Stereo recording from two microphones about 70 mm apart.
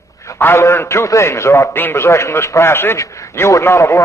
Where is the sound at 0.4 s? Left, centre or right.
Left.